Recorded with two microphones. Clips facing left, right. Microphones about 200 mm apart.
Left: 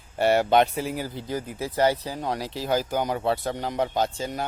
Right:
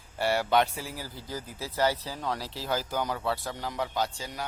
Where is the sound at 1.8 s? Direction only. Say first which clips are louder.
Left 4 dB; 15° left (ahead or behind).